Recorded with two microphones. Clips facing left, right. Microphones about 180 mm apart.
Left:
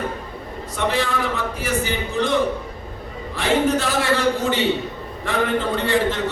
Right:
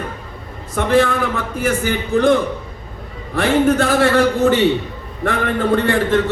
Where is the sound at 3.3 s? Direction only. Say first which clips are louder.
Right 5 dB; 55° right (ahead or behind).